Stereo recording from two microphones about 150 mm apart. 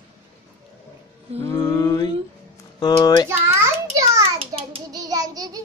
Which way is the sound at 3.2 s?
20° right (ahead or behind).